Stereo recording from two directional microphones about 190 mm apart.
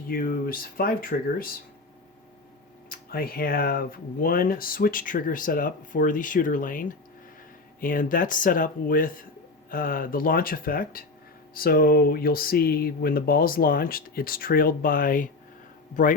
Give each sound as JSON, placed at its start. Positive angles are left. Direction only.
{"t": 0.1, "sound": "speech", "side_deg": 50}
{"t": 2.9, "sound": "speech", "side_deg": 50}